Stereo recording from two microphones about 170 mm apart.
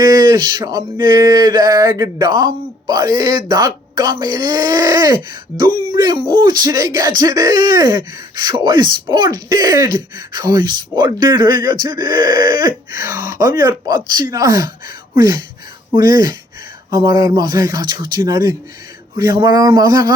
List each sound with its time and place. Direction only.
0.0 s speech: 25° right (ahead or behind)